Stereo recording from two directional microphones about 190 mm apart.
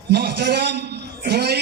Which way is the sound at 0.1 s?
60° right (ahead or behind).